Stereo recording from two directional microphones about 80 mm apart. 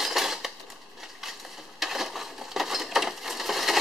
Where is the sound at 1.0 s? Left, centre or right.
Centre.